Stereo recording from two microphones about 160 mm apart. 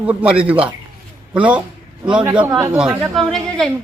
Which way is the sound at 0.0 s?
10° right (ahead or behind).